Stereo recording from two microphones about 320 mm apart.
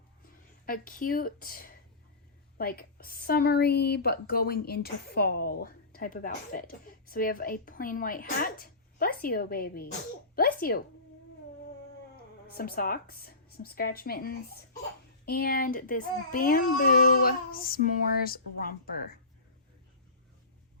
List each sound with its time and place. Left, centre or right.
0.6 s a woman's voice: left
12.1 s a woman's voice: left